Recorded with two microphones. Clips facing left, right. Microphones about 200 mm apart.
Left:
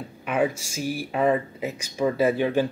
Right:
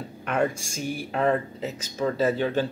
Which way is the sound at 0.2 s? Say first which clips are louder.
Left 1 dB; 5° left (ahead or behind).